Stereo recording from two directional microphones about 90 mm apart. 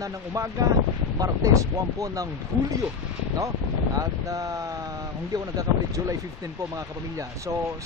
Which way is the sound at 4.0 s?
40° right (ahead or behind).